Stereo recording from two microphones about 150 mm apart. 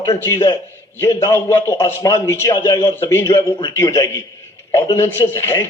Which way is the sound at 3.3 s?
30° left (ahead or behind).